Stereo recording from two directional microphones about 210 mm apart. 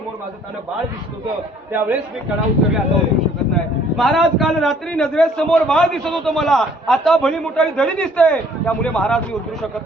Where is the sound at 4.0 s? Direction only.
Centre (ahead or behind).